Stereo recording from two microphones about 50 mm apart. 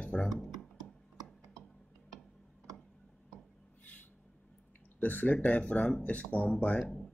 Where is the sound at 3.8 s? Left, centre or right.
Left.